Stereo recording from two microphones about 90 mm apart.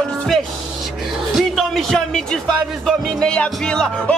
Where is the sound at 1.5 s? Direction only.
Centre (ahead or behind).